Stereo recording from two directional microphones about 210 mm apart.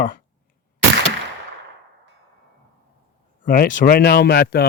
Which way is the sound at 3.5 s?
40° left (ahead or behind).